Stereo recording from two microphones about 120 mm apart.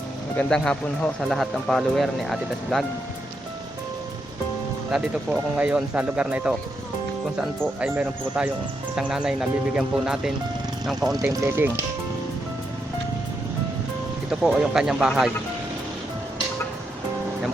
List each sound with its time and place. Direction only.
0.3 s speech: 5° left (ahead or behind)
4.9 s speech: 5° right (ahead or behind)
11.2 s speech: 25° right (ahead or behind)
14.3 s speech: 5° right (ahead or behind)